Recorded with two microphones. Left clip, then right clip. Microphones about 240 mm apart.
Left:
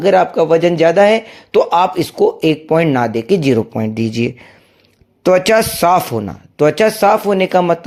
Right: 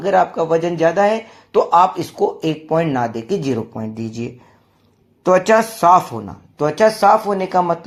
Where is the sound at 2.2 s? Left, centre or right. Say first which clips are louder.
Left 6 dB; left.